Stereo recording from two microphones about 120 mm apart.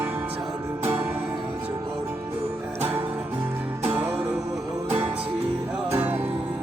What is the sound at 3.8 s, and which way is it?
Music, 15° right (ahead or behind).